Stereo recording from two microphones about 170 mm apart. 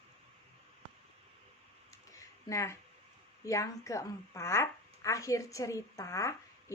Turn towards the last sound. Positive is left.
turn(degrees=15)  # may be behind; listen again after turning